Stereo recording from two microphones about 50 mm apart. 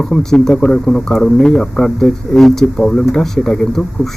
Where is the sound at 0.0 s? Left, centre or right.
Centre.